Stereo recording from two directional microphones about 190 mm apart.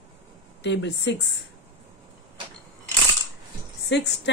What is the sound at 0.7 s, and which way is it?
Speech, 65° left (ahead or behind).